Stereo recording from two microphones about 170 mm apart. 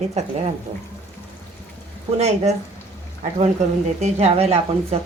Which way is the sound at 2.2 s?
40° right (ahead or behind).